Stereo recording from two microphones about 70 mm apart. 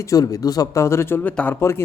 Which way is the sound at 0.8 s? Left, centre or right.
Left.